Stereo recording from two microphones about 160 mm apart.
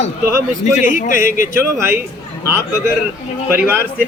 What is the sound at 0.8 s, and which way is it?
Speech, 55° left (ahead or behind).